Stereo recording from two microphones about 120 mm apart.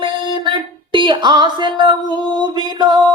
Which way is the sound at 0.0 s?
40° right (ahead or behind).